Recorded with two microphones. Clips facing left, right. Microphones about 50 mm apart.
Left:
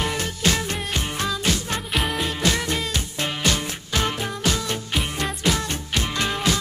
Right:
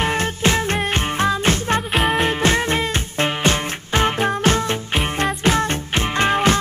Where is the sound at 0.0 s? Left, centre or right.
Right.